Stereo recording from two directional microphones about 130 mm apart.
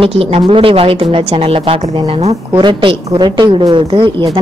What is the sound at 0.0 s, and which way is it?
A woman's voice, 45° right (ahead or behind).